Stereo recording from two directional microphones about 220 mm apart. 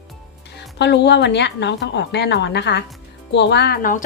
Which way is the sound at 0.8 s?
50° left (ahead or behind).